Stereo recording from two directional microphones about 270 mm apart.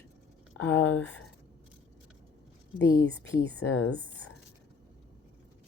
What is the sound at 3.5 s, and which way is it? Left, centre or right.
Speech, left.